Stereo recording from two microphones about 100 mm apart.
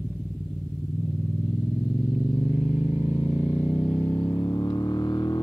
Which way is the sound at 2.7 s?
70° left (ahead or behind).